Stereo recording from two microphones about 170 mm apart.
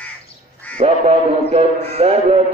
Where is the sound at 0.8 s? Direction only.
35° right (ahead or behind).